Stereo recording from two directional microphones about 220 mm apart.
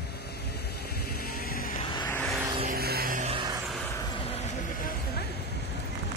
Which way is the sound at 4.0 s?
25° left (ahead or behind).